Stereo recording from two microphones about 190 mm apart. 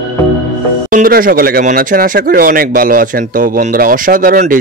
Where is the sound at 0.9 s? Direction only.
45° right (ahead or behind).